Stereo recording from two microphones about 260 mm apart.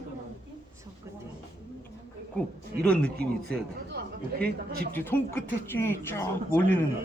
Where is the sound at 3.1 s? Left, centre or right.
Right.